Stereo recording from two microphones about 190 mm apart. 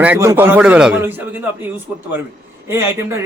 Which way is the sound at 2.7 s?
15° right (ahead or behind).